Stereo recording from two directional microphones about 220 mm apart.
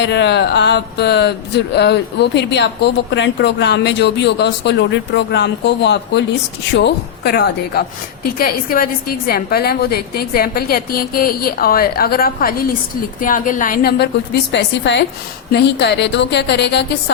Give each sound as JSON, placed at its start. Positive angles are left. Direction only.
{"t": 0.0, "sound": "speech", "side_deg": 50}
{"t": 14.5, "sound": "speech", "side_deg": 55}